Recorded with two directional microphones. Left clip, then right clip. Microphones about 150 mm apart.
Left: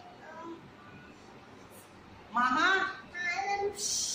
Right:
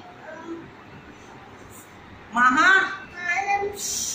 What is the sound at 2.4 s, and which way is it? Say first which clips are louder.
Speech: right 10 dB; 35° left (ahead or behind).